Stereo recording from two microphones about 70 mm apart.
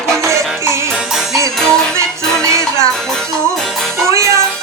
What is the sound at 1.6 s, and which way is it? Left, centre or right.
Music, centre.